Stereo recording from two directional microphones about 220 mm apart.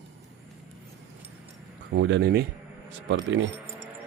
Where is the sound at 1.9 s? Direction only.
55° right (ahead or behind).